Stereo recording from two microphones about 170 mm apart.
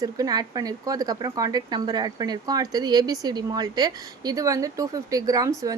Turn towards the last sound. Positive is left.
turn(degrees=-20)  # may be behind; listen again after turning